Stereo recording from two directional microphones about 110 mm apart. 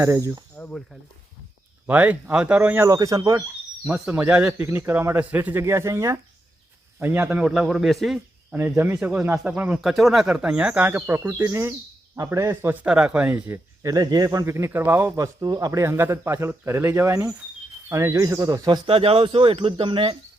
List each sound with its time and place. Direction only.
0.0 s speech: 25° right (ahead or behind)
0.5 s a sound: 15° left (ahead or behind)
1.9 s speech: 15° right (ahead or behind)
2.8 s speech: 30° right (ahead or behind)
4.1 s a man's voice: 15° right (ahead or behind); by 8.2 s centre (ahead or behind)
8.4 s a man's voice: 20° right (ahead or behind)
12.8 s speech: 10° right (ahead or behind)
13.8 s speech: 35° right (ahead or behind)
18.9 s speech: 60° right (ahead or behind)